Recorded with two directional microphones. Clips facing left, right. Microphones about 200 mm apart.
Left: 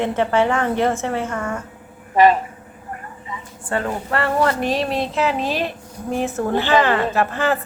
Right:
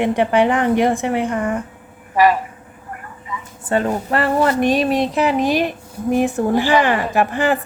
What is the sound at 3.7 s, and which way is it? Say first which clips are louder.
A woman's voice: right 4 dB; 20° right (ahead or behind).